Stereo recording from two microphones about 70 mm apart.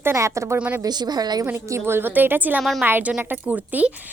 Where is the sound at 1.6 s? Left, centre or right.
Right.